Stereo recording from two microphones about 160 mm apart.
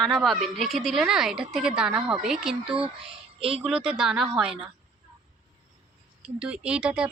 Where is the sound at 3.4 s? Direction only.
35° right (ahead or behind).